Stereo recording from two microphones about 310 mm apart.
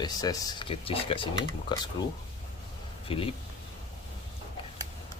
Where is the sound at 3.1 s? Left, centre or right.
Centre.